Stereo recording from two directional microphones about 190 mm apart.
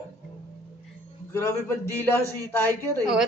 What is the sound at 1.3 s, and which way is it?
Speech, 10° left (ahead or behind).